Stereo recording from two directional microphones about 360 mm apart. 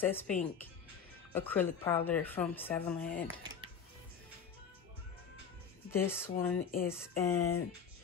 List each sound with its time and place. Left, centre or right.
0.0 s speech: centre
3.1 s speech: left
5.9 s speech: centre